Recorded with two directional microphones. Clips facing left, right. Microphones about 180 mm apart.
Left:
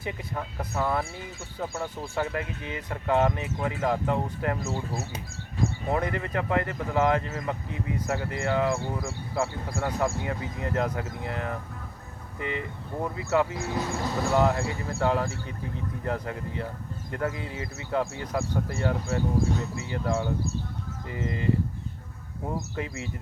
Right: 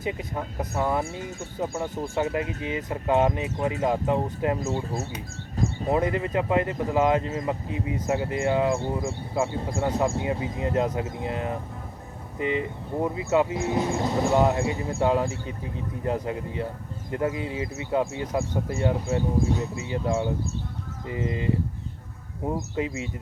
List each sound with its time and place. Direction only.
0.0 s speech: 20° right (ahead or behind)
5.6 s a sound: 40° right (ahead or behind)
5.9 s speech: 20° right (ahead or behind)